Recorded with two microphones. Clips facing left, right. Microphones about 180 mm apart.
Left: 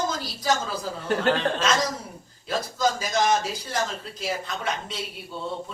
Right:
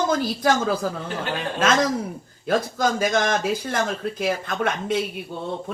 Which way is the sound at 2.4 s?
55° right (ahead or behind).